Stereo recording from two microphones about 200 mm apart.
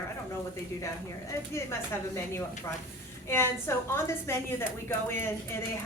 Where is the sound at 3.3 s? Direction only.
10° left (ahead or behind).